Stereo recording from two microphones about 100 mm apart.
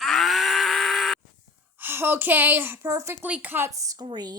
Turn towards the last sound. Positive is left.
turn(degrees=-45)  # may be behind; listen again after turning